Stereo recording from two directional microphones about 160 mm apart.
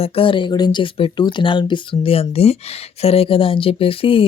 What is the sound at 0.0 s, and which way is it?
Speech, 35° left (ahead or behind).